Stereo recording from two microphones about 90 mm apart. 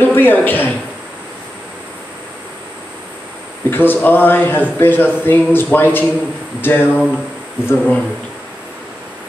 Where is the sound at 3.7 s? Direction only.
25° left (ahead or behind).